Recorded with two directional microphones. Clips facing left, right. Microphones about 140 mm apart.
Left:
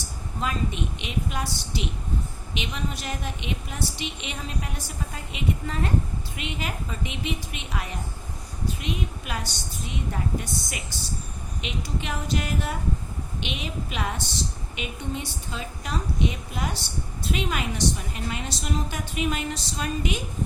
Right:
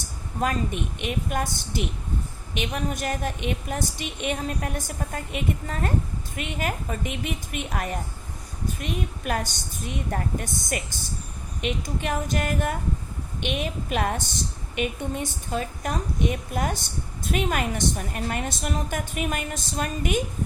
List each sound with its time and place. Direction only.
0.3 s a woman's voice: 50° right (ahead or behind)